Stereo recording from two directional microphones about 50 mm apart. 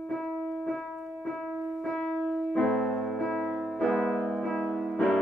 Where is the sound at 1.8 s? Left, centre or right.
Centre.